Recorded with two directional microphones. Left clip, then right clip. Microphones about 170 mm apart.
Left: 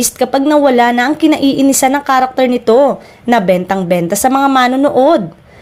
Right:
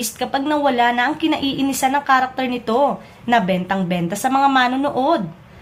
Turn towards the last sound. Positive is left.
turn(degrees=50)  # may be behind; listen again after turning